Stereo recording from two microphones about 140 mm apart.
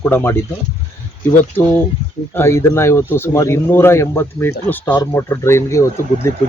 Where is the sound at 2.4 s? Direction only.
20° left (ahead or behind).